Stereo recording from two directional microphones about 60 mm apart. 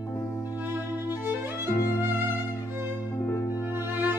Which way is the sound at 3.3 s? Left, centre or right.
Left.